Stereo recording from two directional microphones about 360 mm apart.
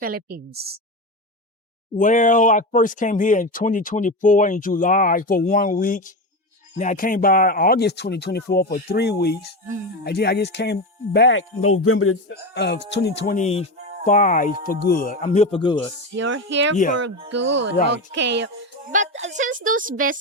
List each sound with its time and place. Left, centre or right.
0.0 s music: right
2.0 s speech: left
16.1 s speech: right
17.2 s music: right